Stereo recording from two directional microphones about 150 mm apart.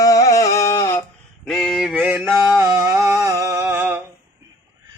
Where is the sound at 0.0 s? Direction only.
25° left (ahead or behind).